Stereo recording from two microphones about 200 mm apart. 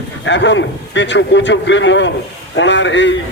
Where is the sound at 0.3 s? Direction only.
65° left (ahead or behind).